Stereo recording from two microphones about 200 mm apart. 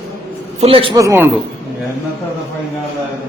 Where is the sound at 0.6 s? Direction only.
25° right (ahead or behind).